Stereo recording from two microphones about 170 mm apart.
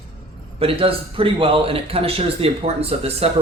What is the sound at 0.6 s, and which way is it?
A man's voice, 35° right (ahead or behind).